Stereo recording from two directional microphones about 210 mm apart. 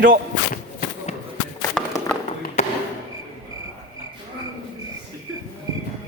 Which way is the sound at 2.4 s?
40° left (ahead or behind).